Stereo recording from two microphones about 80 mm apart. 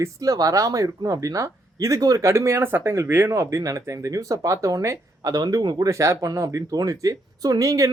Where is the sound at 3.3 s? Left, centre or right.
Right.